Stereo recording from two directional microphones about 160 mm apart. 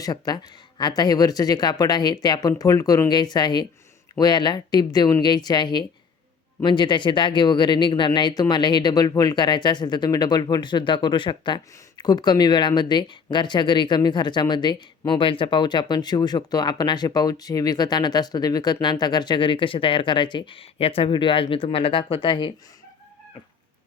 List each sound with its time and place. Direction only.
0.0 s speech: 25° left (ahead or behind)